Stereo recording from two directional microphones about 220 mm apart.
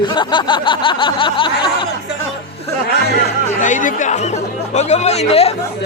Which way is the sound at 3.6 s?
35° left (ahead or behind).